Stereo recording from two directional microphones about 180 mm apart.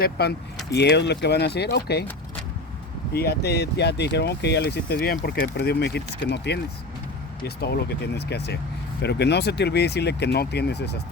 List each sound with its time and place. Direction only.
0.0 s speech: 65° left (ahead or behind)
3.1 s speech: 60° left (ahead or behind)